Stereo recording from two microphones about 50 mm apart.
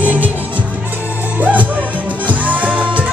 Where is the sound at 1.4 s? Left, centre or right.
Right.